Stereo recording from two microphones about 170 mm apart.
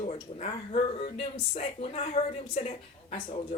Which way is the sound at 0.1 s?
35° left (ahead or behind).